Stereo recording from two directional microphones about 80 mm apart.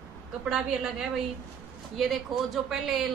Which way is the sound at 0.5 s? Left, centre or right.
Centre.